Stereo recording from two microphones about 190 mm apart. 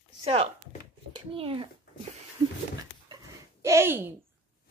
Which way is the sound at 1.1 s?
30° right (ahead or behind).